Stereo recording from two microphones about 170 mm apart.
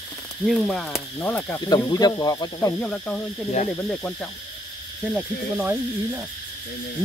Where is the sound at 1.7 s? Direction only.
25° left (ahead or behind).